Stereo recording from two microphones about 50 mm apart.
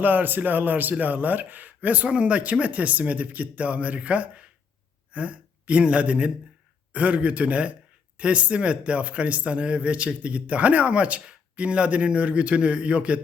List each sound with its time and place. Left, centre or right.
0.0 s a man's voice: right